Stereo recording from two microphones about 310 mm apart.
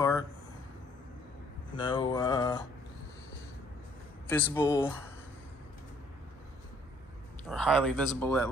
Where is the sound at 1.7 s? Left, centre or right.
Centre.